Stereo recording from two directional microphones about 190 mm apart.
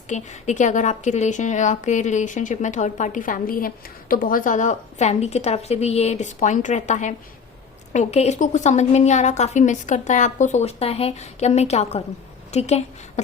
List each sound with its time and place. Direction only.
0.1 s a woman's voice: 40° left (ahead or behind)